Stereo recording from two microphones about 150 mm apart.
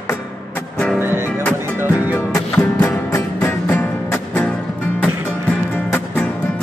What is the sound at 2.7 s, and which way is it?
Music, 20° left (ahead or behind).